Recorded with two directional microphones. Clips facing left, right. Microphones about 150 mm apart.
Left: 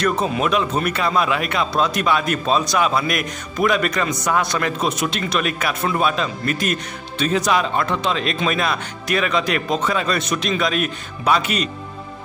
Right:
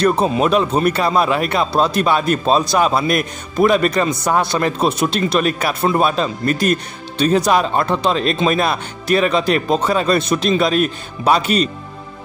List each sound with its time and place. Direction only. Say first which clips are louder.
0.0 s speech: right 5 dB; 35° right (ahead or behind)